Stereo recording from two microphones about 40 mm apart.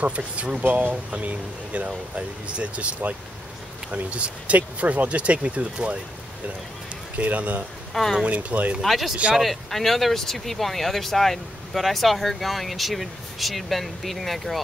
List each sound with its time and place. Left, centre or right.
0.0 s speech: right
0.7 s speech: right
1.1 s speech: right
3.9 s speech: right
7.2 s speech: right
8.0 s speech: centre
8.3 s speech: right
8.8 s speech: centre